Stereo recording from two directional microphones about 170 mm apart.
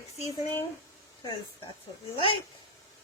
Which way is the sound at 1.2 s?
25° left (ahead or behind).